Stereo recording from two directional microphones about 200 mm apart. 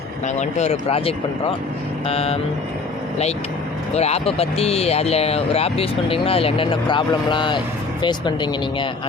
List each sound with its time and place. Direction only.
0.3 s speech: 35° left (ahead or behind)
2.0 s vehicle: 30° left (ahead or behind)
3.9 s speech: 30° left (ahead or behind)